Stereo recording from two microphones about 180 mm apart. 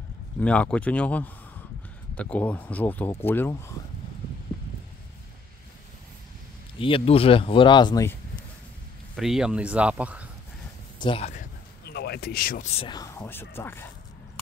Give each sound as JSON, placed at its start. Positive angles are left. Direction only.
{"t": 0.4, "sound": "speech", "side_deg": 5}
{"t": 6.8, "sound": "speech", "side_deg": 30}
{"t": 9.1, "sound": "speech", "side_deg": 0}
{"t": 11.0, "sound": "speech", "side_deg": 30}
{"t": 11.8, "sound": "a sound", "side_deg": 65}
{"t": 12.6, "sound": "speech", "side_deg": 35}
{"t": 12.9, "sound": "speech", "side_deg": 20}